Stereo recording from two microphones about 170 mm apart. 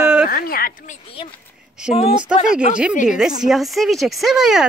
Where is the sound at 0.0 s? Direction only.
5° right (ahead or behind).